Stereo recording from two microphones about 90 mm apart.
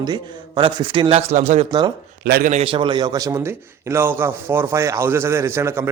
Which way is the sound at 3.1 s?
40° right (ahead or behind).